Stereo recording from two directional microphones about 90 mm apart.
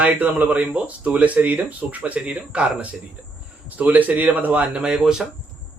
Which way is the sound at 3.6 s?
15° right (ahead or behind).